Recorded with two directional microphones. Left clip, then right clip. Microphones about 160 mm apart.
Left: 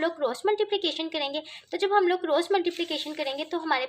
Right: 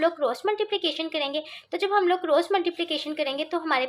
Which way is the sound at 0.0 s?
30° left (ahead or behind).